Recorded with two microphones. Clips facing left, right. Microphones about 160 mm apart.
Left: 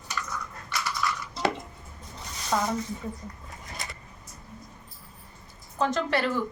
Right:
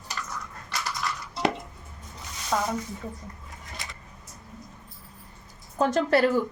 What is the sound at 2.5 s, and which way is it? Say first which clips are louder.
Speech: even; centre (ahead or behind).